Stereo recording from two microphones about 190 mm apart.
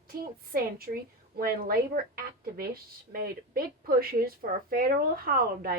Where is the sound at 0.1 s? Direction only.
50° right (ahead or behind).